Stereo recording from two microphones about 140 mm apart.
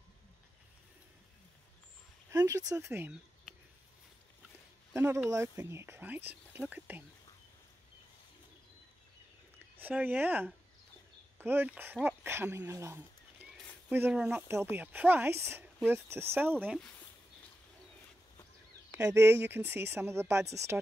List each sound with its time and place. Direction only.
2.3 s speech: 25° right (ahead or behind)
4.9 s speech: 20° right (ahead or behind)
9.8 s speech: 15° right (ahead or behind)
18.9 s speech: 20° right (ahead or behind)